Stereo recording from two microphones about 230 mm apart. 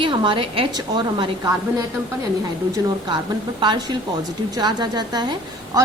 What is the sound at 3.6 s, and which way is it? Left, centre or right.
A woman's voice, centre.